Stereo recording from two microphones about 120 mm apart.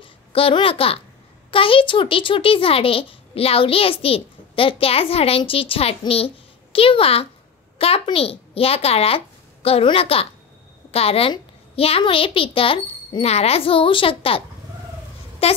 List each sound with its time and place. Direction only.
0.0 s a child's voice: 50° left (ahead or behind)
15.4 s speech: 55° left (ahead or behind)